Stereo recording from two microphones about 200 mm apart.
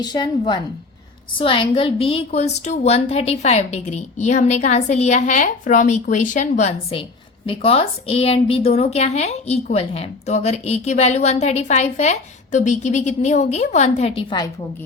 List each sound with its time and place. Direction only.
0.0 s a woman's voice: 20° left (ahead or behind)